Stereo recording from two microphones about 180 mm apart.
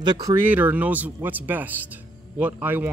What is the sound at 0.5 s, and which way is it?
Speech, 10° right (ahead or behind).